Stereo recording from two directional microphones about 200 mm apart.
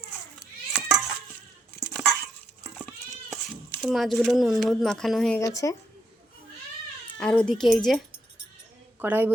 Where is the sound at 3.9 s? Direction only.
Centre (ahead or behind).